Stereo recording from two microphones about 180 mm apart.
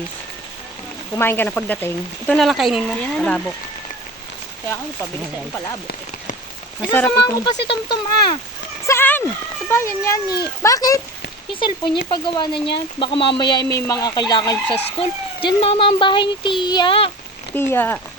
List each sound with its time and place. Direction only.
1.1 s speech: 10° left (ahead or behind)
6.9 s speech: 10° left (ahead or behind)
7.4 s speech: 25° left (ahead or behind)
8.9 s a sound: 10° left (ahead or behind)
9.6 s speech: 15° left (ahead or behind)
12.1 s speech: 25° left (ahead or behind)
17.5 s speech: 10° left (ahead or behind)